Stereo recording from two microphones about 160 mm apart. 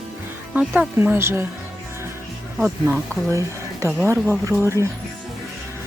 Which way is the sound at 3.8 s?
20° right (ahead or behind).